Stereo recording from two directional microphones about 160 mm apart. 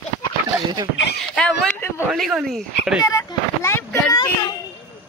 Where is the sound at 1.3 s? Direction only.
5° left (ahead or behind).